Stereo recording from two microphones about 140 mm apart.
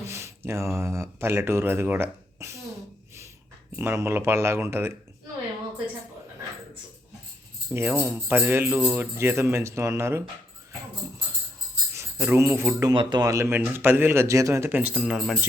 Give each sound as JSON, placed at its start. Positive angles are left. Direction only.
{"t": 0.0, "sound": "speech", "side_deg": -20}
{"t": 3.8, "sound": "speech", "side_deg": -20}
{"t": 7.7, "sound": "speech", "side_deg": -15}
{"t": 12.2, "sound": "speech", "side_deg": -15}
{"t": 12.9, "sound": "speech", "side_deg": -35}